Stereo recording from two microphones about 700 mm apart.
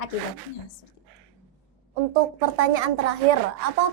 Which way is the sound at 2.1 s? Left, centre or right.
Right.